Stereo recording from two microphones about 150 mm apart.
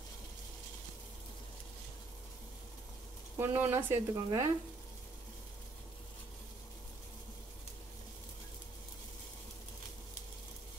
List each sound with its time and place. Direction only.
3.3 s speech: 15° right (ahead or behind)